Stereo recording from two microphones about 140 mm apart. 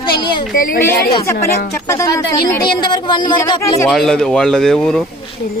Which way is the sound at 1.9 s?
20° left (ahead or behind).